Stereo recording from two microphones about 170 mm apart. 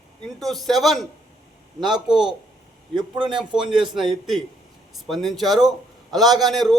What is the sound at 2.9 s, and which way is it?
Speech, 25° right (ahead or behind).